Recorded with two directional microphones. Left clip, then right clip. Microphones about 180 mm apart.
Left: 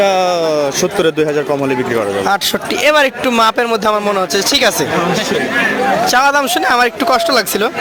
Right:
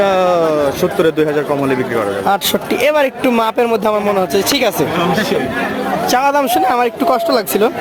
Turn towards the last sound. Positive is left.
turn(degrees=-5)  # may be behind; listen again after turning